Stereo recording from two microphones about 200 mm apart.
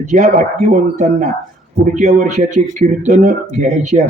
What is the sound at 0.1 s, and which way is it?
Speech, 40° right (ahead or behind).